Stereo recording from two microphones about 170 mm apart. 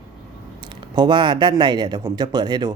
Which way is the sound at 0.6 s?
25° right (ahead or behind).